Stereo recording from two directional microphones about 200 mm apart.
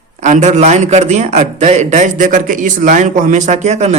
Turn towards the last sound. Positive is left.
turn(degrees=-35)  # may be behind; listen again after turning